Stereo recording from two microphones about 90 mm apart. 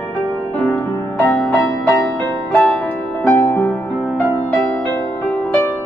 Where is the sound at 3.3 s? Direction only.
20° left (ahead or behind).